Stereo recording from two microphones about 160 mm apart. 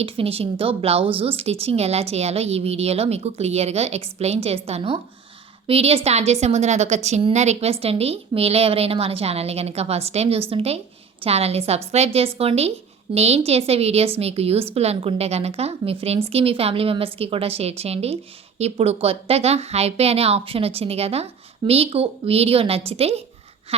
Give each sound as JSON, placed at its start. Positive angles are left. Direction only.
{"t": 0.0, "sound": "a woman's voice", "side_deg": -35}